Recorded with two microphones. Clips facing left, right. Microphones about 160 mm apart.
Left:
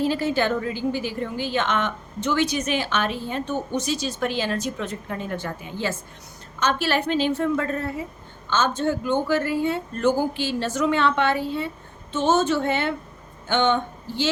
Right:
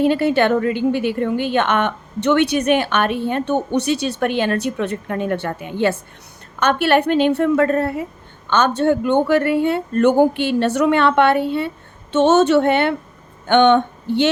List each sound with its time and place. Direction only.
0.0 s a woman's voice: 65° right (ahead or behind)